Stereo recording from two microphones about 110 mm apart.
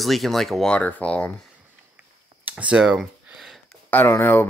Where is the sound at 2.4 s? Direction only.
10° right (ahead or behind).